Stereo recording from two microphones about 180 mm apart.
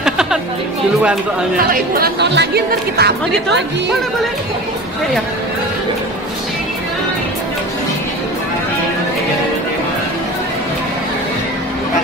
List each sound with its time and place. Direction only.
0.0 s music: 5° right (ahead or behind)
1.7 s speech: 60° right (ahead or behind)